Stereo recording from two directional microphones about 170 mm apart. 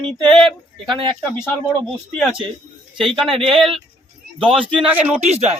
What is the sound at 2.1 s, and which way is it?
A man's voice, centre (ahead or behind).